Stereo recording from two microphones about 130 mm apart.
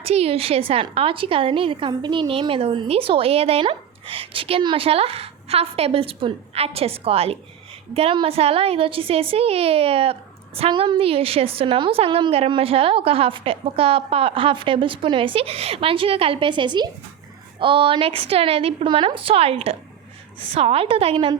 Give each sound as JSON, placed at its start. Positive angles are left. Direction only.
{"t": 0.0, "sound": "a woman's voice", "side_deg": -50}